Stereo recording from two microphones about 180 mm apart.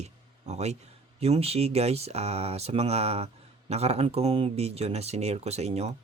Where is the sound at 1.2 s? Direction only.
35° right (ahead or behind).